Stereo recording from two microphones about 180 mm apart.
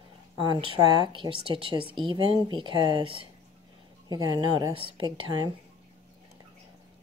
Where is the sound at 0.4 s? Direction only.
25° right (ahead or behind).